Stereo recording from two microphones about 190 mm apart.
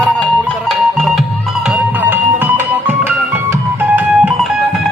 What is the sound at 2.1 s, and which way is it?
Music, 10° right (ahead or behind).